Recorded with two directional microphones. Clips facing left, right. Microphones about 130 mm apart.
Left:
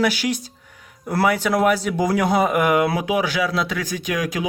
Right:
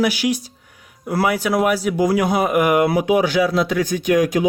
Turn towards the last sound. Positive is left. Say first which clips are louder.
# right 8 dB
turn(degrees=-25)  # may be behind; listen again after turning